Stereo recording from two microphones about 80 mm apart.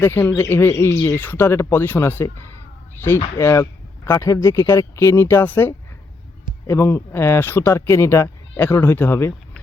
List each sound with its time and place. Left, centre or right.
0.0 s speech: left
3.3 s speech: left